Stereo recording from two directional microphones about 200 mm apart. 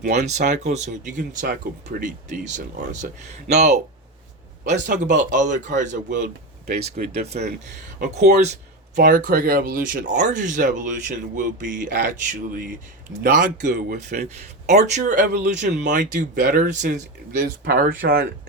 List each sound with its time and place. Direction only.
0.0 s speech: 35° right (ahead or behind)